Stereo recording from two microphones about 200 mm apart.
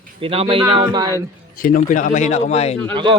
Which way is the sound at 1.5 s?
45° left (ahead or behind).